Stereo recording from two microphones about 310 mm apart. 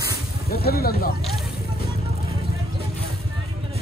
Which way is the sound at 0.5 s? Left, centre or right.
Left.